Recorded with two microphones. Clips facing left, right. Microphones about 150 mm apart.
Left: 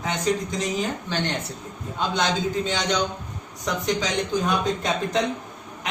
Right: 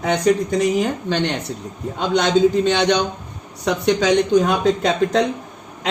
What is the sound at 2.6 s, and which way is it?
A man's voice, 75° right (ahead or behind).